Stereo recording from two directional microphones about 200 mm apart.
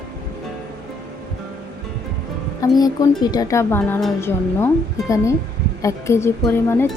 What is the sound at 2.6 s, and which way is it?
Speech, 20° left (ahead or behind).